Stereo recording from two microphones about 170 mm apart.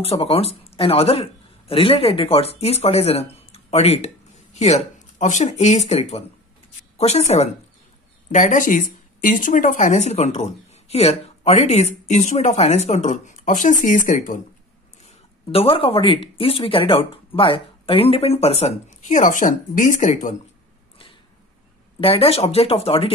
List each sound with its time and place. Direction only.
0.0 s a man's voice: 35° left (ahead or behind)
15.0 s a man's voice: 35° left (ahead or behind); by 20.3 s 50° left (ahead or behind)
22.0 s a man's voice: 35° left (ahead or behind)